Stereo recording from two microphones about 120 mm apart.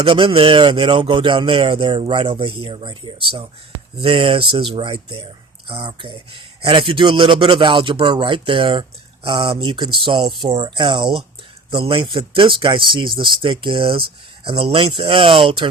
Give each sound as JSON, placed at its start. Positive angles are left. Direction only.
{"t": 0.0, "sound": "speech", "side_deg": -45}